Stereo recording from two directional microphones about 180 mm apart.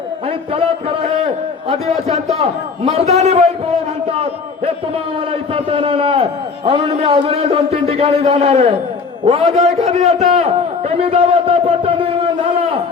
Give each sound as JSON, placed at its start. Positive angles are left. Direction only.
{"t": 0.5, "sound": "a man's voice", "side_deg": -30}